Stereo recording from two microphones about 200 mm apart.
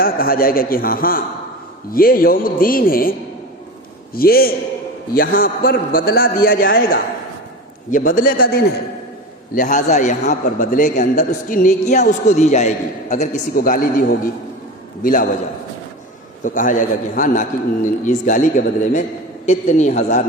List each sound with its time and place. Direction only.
0.0 s a man's voice: 45° left (ahead or behind)
9.6 s a man's voice: 35° left (ahead or behind)
16.4 s a man's voice: 40° left (ahead or behind)